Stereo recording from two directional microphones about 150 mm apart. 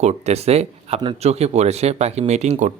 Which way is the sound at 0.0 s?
45° right (ahead or behind).